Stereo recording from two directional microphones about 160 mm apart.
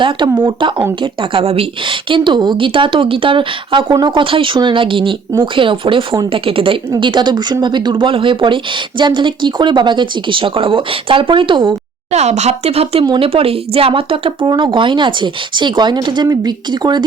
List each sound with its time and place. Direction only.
0.0 s a woman's voice: 30° right (ahead or behind)
12.1 s a woman's voice: 45° right (ahead or behind); by 17.0 s 25° right (ahead or behind)